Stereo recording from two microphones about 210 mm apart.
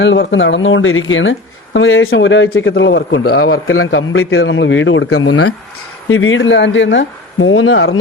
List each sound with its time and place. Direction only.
0.0 s speech: 60° left (ahead or behind); by 5.5 s 90° left
6.1 s speech: 70° left (ahead or behind)